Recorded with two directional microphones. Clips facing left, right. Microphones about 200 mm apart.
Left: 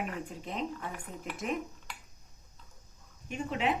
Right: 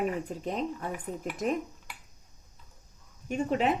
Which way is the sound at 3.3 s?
40° right (ahead or behind).